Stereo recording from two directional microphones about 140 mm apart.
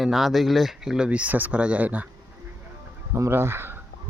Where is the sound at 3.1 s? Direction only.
20° right (ahead or behind).